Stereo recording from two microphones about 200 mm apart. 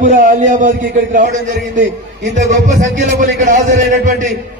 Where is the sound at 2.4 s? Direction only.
40° right (ahead or behind).